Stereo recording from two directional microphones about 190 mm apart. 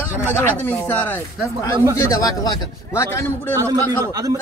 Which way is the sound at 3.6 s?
15° right (ahead or behind).